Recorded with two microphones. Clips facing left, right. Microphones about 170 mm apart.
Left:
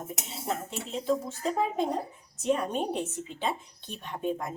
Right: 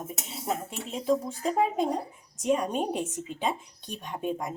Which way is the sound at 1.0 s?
5° right (ahead or behind).